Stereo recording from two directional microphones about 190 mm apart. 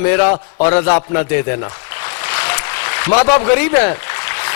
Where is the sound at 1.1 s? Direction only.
15° left (ahead or behind).